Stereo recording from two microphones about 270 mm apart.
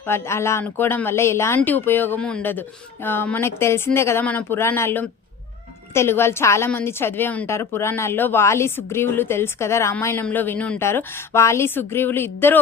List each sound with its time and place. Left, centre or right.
0.0 s a woman's voice: centre